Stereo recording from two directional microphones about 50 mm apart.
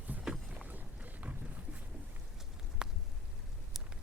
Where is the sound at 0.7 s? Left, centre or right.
Right.